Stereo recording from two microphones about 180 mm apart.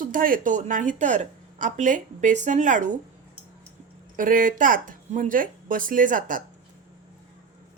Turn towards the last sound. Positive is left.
turn(degrees=-50)  # may be behind; listen again after turning